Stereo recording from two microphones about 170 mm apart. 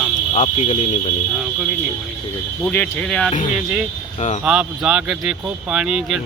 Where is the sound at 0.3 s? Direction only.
40° left (ahead or behind).